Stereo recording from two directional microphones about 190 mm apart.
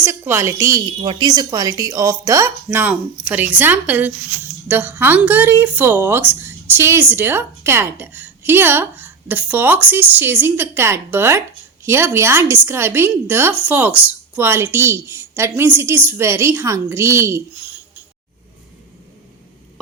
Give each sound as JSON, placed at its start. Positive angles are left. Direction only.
{"t": 0.0, "sound": "speech", "side_deg": -10}
{"t": 1.0, "sound": "speech", "side_deg": -25}